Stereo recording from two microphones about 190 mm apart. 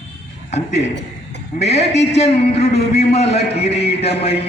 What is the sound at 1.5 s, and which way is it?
A man's voice, 35° left (ahead or behind).